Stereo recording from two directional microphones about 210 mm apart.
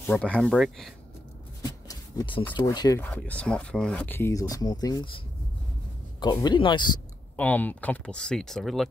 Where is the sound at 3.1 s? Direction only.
5° left (ahead or behind).